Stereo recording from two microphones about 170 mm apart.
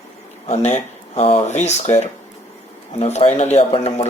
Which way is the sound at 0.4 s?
40° left (ahead or behind).